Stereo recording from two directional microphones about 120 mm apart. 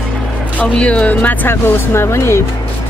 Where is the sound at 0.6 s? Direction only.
10° left (ahead or behind).